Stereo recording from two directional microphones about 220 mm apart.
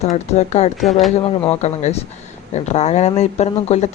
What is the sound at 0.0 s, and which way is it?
Speech, 30° left (ahead or behind).